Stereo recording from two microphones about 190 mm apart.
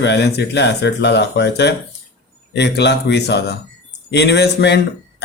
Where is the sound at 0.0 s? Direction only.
65° left (ahead or behind).